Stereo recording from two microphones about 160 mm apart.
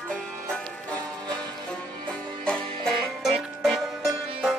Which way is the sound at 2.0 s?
5° left (ahead or behind).